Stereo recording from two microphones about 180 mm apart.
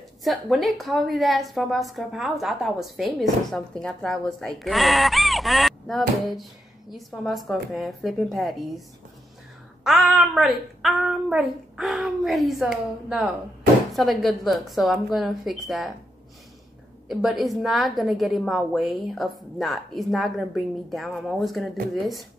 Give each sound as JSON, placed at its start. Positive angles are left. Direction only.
{"t": 0.2, "sound": "a woman's voice", "side_deg": 0}
{"t": 9.8, "sound": "a woman's voice", "side_deg": 0}
{"t": 17.1, "sound": "a woman's voice", "side_deg": 0}